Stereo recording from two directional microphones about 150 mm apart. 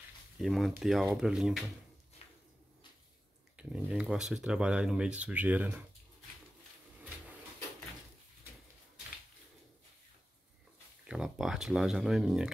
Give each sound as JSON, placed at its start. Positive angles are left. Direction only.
{"t": 0.4, "sound": "speech", "side_deg": 0}
{"t": 2.2, "sound": "a sound", "side_deg": 45}
{"t": 3.5, "sound": "speech", "side_deg": -5}
{"t": 11.1, "sound": "speech", "side_deg": -5}